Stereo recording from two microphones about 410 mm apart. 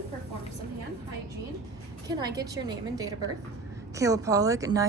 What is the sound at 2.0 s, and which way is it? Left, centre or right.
A woman's voice, centre.